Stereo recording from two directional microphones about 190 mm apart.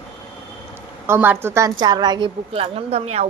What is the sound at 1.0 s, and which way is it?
A woman's voice, 10° right (ahead or behind).